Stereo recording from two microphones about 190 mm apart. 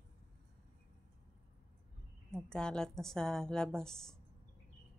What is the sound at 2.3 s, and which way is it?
A woman's voice, 5° left (ahead or behind).